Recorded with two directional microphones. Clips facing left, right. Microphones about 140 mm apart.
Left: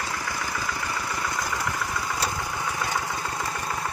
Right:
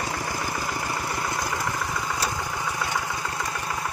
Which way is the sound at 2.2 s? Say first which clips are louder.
Even; 15° right (ahead or behind).